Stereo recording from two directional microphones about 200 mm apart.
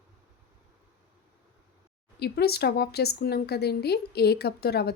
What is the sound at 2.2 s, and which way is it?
A woman's voice, 55° left (ahead or behind).